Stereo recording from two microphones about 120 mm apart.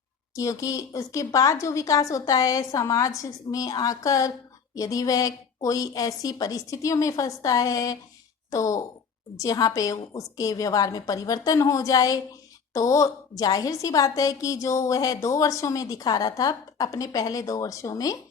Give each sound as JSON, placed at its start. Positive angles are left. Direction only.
{"t": 0.3, "sound": "a woman's voice", "side_deg": 25}